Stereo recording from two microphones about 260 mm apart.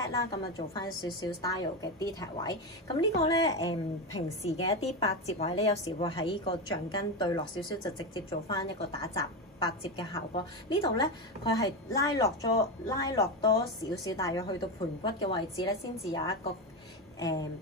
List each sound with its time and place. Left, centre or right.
0.0 s speech: centre
4.4 s a woman's voice: left